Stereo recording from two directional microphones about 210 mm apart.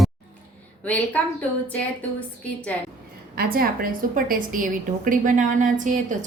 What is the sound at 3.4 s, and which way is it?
A woman's voice, 45° right (ahead or behind).